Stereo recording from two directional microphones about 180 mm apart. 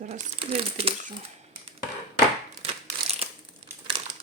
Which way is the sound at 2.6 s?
35° right (ahead or behind).